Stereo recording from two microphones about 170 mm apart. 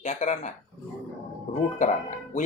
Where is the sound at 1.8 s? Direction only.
50° left (ahead or behind).